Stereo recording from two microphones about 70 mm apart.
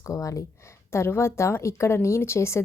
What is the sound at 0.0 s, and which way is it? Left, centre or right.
Speech, left.